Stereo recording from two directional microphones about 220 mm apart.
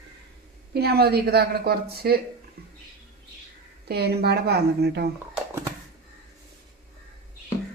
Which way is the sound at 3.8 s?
45° right (ahead or behind).